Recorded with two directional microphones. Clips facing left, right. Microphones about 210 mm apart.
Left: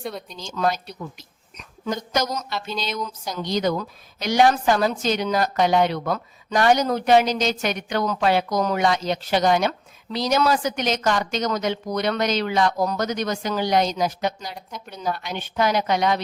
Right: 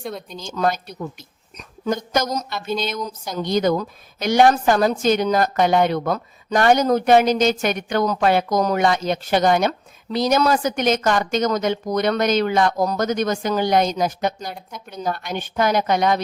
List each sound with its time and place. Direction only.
0.3 s a woman's voice: 50° right (ahead or behind)
14.5 s speech: centre (ahead or behind)
14.9 s a woman's voice: 50° right (ahead or behind)